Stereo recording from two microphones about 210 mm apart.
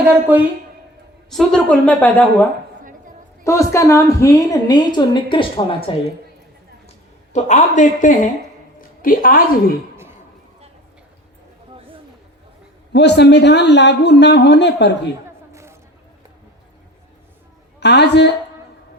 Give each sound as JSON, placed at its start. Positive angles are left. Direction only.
{"t": 0.3, "sound": "a woman's voice", "side_deg": -10}
{"t": 1.3, "sound": "a woman's voice", "side_deg": 0}
{"t": 7.3, "sound": "a woman's voice", "side_deg": 35}
{"t": 12.9, "sound": "speech", "side_deg": 55}
{"t": 17.7, "sound": "a woman's voice", "side_deg": 55}